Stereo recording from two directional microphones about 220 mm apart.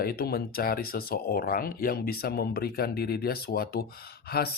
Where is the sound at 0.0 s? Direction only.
45° left (ahead or behind).